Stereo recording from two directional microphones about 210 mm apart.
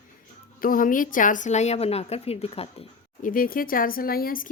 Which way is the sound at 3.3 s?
40° left (ahead or behind).